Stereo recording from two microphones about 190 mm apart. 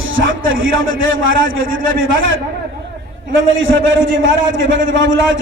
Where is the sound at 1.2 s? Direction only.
90° right.